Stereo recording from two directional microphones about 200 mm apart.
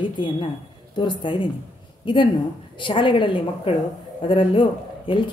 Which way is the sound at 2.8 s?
25° left (ahead or behind).